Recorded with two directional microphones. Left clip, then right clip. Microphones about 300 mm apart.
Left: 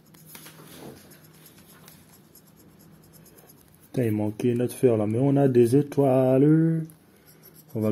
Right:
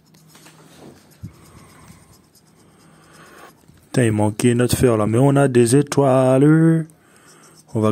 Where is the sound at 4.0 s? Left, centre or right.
Right.